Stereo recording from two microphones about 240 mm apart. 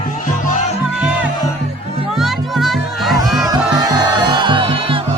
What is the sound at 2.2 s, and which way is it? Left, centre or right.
Music, centre.